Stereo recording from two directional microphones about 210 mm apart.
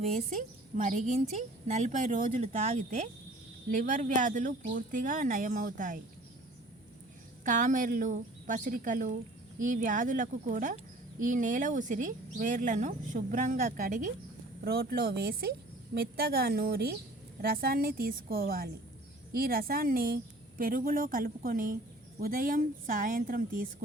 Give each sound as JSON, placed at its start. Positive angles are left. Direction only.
{"t": 0.0, "sound": "a woman's voice", "side_deg": -35}
{"t": 7.4, "sound": "a woman's voice", "side_deg": -40}